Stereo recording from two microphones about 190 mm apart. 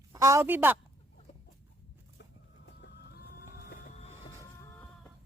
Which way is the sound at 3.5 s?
50° left (ahead or behind).